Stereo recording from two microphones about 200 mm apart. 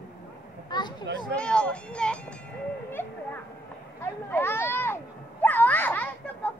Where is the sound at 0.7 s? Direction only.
20° left (ahead or behind).